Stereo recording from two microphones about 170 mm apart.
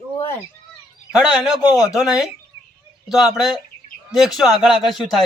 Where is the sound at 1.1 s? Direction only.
5° right (ahead or behind).